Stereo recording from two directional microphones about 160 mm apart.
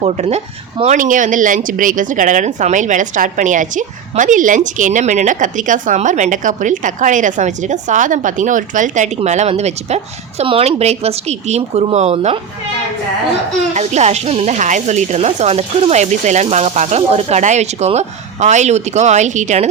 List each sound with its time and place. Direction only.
0.0 s speech: 40° right (ahead or behind)
13.7 s speech: 45° right (ahead or behind)